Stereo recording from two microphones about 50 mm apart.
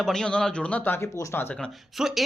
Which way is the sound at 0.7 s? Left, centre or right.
Left.